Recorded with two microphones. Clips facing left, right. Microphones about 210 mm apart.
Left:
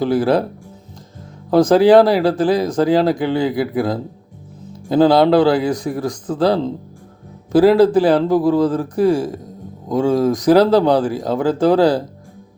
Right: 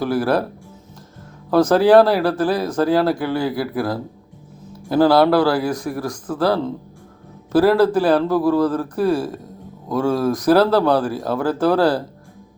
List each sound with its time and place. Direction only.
0.0 s speech: 15° left (ahead or behind)
1.5 s speech: 15° left (ahead or behind)